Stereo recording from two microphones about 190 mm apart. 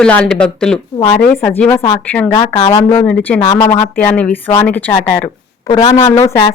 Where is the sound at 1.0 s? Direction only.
20° left (ahead or behind).